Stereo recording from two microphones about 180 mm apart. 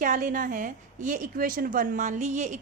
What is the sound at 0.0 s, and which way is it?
A woman's voice, 45° right (ahead or behind).